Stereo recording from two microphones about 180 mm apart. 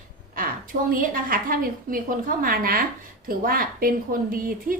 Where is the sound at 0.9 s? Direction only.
50° right (ahead or behind).